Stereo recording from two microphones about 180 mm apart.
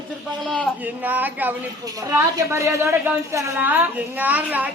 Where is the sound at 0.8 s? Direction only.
10° right (ahead or behind).